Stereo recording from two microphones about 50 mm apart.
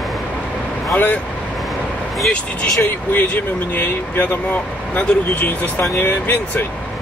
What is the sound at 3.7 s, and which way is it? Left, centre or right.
Speech, left.